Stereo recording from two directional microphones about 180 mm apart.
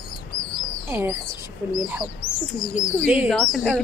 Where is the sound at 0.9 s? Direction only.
10° right (ahead or behind).